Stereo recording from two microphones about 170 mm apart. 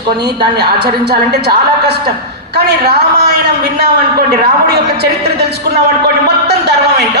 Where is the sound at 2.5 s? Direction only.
70° right (ahead or behind).